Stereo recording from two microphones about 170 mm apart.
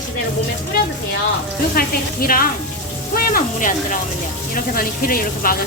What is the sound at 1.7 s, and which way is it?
Speech, 60° left (ahead or behind).